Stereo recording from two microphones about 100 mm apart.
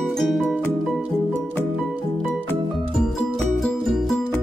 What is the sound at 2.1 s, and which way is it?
Music, 10° left (ahead or behind).